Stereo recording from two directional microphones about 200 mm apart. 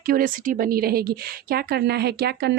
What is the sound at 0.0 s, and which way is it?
A woman's voice, 45° right (ahead or behind).